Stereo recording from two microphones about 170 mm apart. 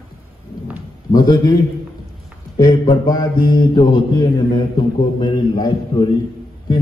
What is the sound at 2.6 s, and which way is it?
A man's voice, 25° left (ahead or behind).